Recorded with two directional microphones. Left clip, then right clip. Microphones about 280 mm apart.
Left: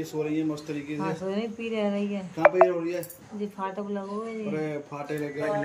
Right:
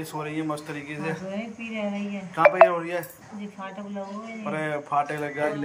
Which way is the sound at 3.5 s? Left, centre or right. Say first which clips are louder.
Left 2 dB; centre.